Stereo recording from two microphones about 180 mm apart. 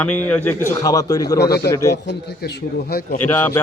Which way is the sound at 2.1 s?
70° left (ahead or behind).